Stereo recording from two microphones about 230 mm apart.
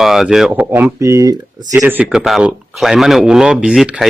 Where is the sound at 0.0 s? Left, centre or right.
Centre.